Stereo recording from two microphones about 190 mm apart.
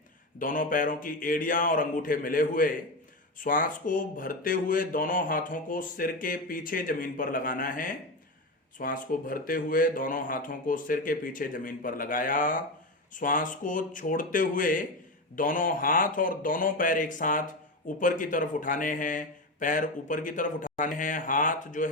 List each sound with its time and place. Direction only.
0.3 s speech: 45° left (ahead or behind)